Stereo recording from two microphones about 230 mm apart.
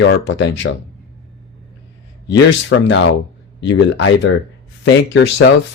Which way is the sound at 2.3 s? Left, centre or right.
Left.